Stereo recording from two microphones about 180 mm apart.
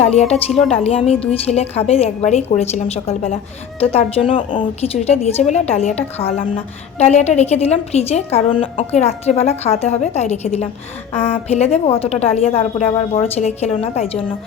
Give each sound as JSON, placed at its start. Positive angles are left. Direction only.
{"t": 0.1, "sound": "a woman's voice", "side_deg": 35}